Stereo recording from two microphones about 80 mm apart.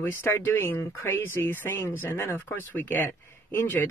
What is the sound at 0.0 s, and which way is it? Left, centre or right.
Speech, left.